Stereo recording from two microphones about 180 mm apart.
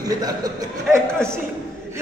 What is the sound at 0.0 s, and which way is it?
Speech, 20° right (ahead or behind).